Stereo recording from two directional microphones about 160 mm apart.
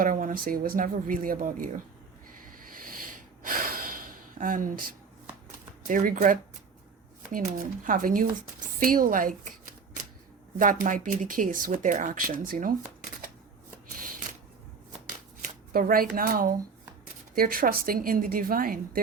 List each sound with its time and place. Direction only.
0.0 s speech: 55° right (ahead or behind)
3.4 s gasp: 60° right (ahead or behind)
5.9 s speech: 60° right (ahead or behind)
15.7 s speech: 65° right (ahead or behind)